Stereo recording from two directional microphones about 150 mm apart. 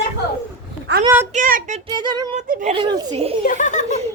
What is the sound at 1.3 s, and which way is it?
Speech, 60° right (ahead or behind).